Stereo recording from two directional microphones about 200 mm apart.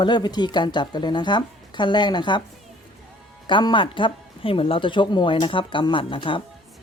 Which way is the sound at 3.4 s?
25° left (ahead or behind).